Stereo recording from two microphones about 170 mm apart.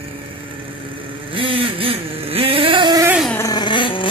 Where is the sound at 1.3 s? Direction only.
30° right (ahead or behind).